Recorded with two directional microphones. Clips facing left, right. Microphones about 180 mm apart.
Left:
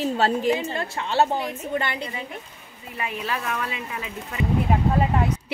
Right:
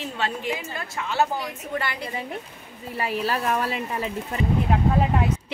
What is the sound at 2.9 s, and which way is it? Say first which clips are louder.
Speech: right 3 dB; 35° right (ahead or behind).